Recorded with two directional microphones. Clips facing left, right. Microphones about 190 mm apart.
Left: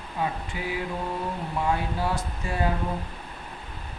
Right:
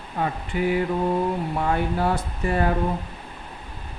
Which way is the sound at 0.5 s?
50° right (ahead or behind).